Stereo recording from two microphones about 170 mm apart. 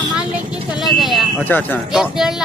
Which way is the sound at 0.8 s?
Centre (ahead or behind).